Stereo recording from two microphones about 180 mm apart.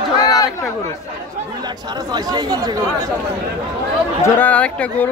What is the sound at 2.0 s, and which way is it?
Speech, 20° right (ahead or behind).